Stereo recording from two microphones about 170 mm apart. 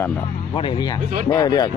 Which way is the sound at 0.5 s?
30° left (ahead or behind).